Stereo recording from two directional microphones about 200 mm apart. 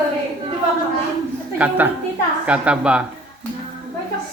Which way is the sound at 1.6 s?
5° right (ahead or behind).